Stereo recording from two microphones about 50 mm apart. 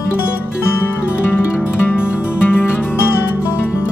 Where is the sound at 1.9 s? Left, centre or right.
Left.